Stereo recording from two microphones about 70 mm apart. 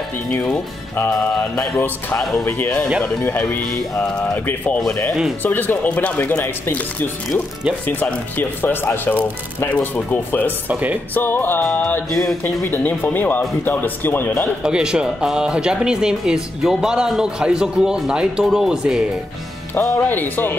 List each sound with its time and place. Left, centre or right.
0.9 s speech: left
1.5 s speech: centre
2.1 s music: centre
2.4 s speech: left
3.9 s music: centre
5.4 s speech: left
10.7 s speech: right
11.1 s speech: left
14.6 s speech: centre
20.0 s speech: left